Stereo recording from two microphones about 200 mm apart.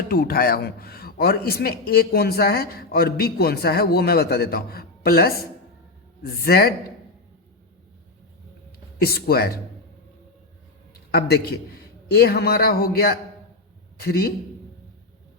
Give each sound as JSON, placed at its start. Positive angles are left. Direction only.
{"t": 0.1, "sound": "a man's voice", "side_deg": 50}
{"t": 9.0, "sound": "a man's voice", "side_deg": 50}
{"t": 11.1, "sound": "a man's voice", "side_deg": 50}